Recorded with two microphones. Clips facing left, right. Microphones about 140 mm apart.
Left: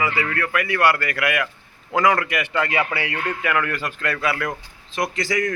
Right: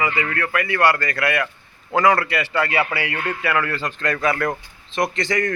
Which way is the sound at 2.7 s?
30° right (ahead or behind).